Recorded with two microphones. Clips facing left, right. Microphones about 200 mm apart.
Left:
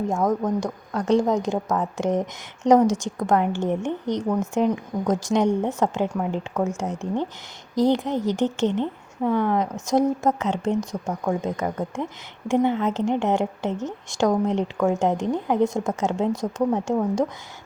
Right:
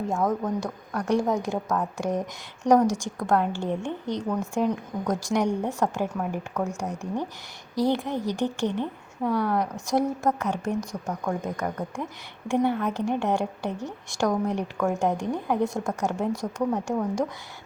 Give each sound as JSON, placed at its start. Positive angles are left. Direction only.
{"t": 0.6, "sound": "a woman's voice", "side_deg": 20}